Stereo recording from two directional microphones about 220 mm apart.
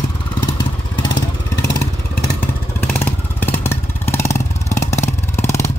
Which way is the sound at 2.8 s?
10° left (ahead or behind).